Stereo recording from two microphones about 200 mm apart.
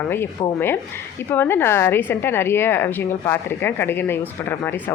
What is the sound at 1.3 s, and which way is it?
Speech, 10° left (ahead or behind).